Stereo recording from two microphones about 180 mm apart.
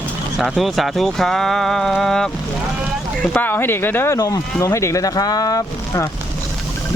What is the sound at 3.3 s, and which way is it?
Speech, 10° left (ahead or behind).